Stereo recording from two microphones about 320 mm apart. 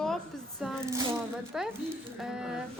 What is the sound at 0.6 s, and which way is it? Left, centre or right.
Speech, centre.